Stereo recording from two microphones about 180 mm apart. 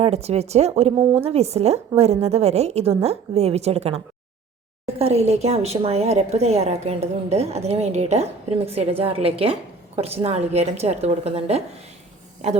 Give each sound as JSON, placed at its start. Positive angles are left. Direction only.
{"t": 0.0, "sound": "a woman's voice", "side_deg": -35}